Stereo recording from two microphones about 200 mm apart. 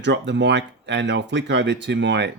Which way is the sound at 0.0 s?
60° right (ahead or behind).